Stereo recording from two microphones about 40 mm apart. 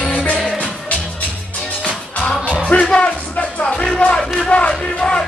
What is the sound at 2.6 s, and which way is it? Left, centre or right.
Music, left.